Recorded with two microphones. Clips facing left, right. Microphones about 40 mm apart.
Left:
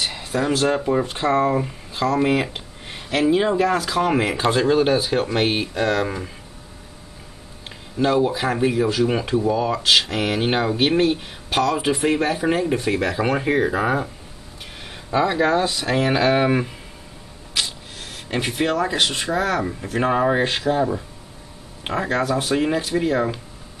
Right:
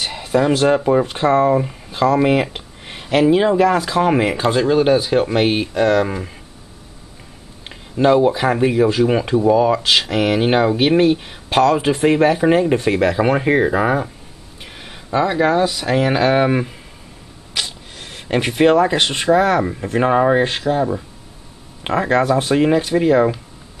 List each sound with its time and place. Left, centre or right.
0.0 s speech: centre
1.9 s speech: centre
2.5 s a sound: centre
3.6 s speech: centre
7.7 s speech: centre
11.7 s speech: right
12.7 s speech: right
13.2 s speech: centre
18.0 s speech: right
19.6 s speech: centre
21.8 s speech: centre
22.2 s speech: right
22.9 s speech: centre